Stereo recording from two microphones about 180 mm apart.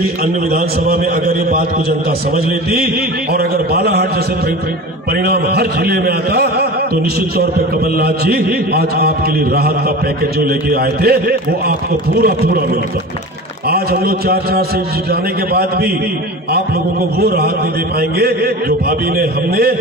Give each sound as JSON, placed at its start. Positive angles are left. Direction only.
{"t": 0.0, "sound": "a man's voice", "side_deg": -55}
{"t": 3.3, "sound": "a man's voice", "side_deg": -60}
{"t": 5.2, "sound": "a man's voice", "side_deg": -60}
{"t": 13.7, "sound": "a man's voice", "side_deg": -60}
{"t": 18.2, "sound": "a man's voice", "side_deg": -60}